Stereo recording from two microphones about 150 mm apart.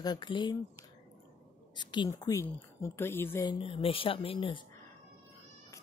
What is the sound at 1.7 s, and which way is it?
A woman's voice, 30° left (ahead or behind).